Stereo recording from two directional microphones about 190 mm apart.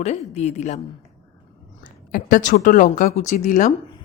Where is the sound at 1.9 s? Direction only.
45° left (ahead or behind).